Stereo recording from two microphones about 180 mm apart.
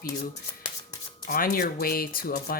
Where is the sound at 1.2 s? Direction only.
50° left (ahead or behind).